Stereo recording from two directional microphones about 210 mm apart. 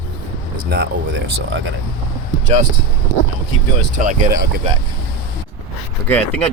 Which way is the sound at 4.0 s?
35° right (ahead or behind).